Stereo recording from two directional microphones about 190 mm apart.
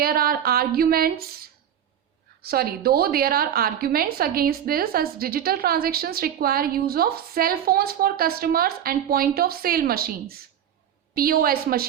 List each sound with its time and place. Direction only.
0.0 s a woman's voice: 50° right (ahead or behind)